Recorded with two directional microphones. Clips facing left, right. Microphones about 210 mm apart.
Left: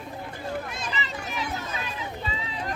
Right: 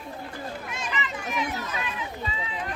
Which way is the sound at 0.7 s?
35° left (ahead or behind).